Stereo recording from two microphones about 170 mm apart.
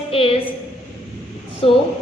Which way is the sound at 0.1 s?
35° left (ahead or behind).